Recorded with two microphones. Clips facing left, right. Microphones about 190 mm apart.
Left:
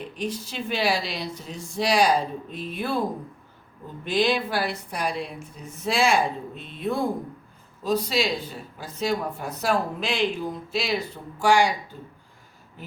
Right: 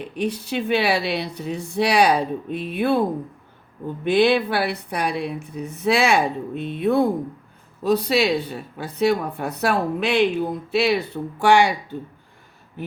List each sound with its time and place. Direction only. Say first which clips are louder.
0.2 s speech: right 7 dB; 65° right (ahead or behind)
4.0 s speech: right 6 dB; 60° right (ahead or behind)